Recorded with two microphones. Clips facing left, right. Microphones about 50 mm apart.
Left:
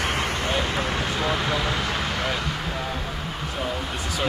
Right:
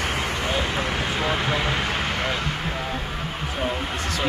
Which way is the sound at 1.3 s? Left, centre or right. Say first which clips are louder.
Right 1 dB; centre.